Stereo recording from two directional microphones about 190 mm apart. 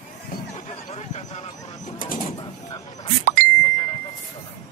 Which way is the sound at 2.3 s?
20° left (ahead or behind).